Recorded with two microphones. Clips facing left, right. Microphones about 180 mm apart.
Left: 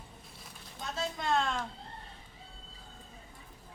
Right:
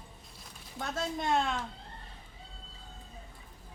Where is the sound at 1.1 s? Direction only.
15° right (ahead or behind).